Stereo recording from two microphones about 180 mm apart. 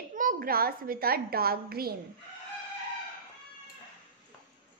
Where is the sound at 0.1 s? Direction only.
45° right (ahead or behind).